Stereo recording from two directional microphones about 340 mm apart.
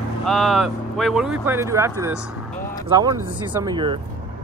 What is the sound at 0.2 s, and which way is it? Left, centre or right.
Speech, centre.